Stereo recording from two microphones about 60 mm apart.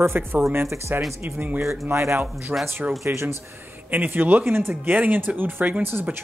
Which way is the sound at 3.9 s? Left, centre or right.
Right.